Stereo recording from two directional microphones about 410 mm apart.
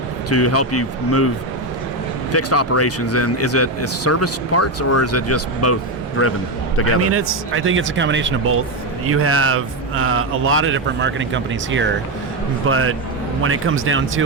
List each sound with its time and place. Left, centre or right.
0.3 s a man's voice: left
2.3 s a man's voice: left
7.1 s a man's voice: right